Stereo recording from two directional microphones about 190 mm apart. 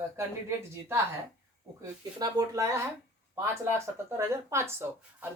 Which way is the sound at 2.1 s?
20° right (ahead or behind).